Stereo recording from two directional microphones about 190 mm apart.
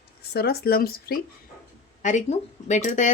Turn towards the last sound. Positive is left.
turn(degrees=40)  # may be behind; listen again after turning